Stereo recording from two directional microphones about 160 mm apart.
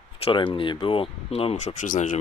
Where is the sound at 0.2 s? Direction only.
30° left (ahead or behind).